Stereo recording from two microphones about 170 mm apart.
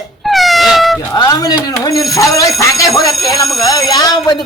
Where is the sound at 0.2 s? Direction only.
Centre (ahead or behind).